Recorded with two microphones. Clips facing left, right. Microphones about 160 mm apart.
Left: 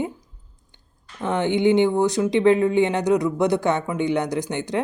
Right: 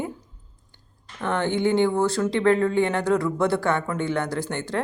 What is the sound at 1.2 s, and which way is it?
Speech, 15° left (ahead or behind).